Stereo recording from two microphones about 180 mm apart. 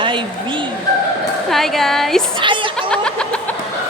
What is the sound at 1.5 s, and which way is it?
Speech, centre (ahead or behind).